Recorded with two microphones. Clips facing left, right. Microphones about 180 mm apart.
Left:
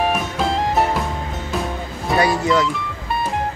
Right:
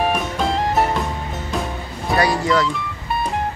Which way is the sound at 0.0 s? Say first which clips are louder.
Even; centre (ahead or behind).